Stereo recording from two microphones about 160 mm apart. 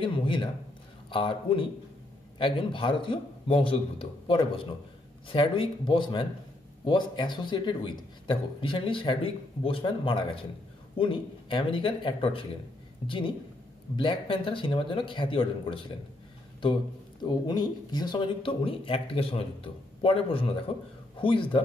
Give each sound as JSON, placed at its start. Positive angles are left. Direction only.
{"t": 0.0, "sound": "speech", "side_deg": 30}
{"t": 17.2, "sound": "speech", "side_deg": 25}